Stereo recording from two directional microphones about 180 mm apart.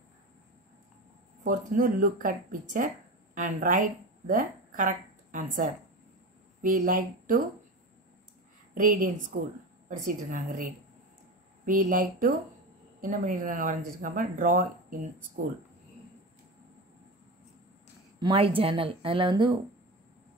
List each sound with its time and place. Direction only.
1.4 s speech: 45° right (ahead or behind)
8.7 s speech: 45° right (ahead or behind)
18.2 s a woman's voice: 30° right (ahead or behind)